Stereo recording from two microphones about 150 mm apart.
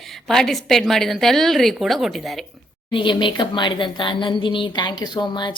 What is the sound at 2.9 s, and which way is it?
A woman's voice, 35° left (ahead or behind).